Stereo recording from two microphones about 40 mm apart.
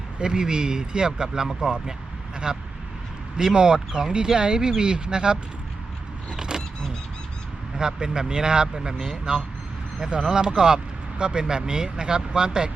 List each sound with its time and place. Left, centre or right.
0.2 s speech: centre
2.5 s speech: right
6.3 s vehicle: centre
7.8 s speech: centre